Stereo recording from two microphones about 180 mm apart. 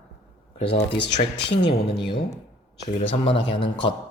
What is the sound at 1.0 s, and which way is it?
Speech, 75° left (ahead or behind).